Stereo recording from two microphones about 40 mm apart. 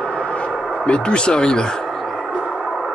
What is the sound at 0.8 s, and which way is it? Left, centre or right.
Speech, left.